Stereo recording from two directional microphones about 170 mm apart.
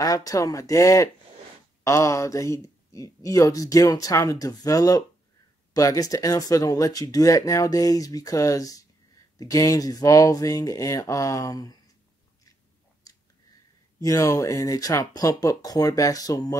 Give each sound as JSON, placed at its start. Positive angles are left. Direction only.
{"t": 0.0, "sound": "speech", "side_deg": 20}
{"t": 13.0, "sound": "a sound", "side_deg": 20}
{"t": 14.0, "sound": "speech", "side_deg": 20}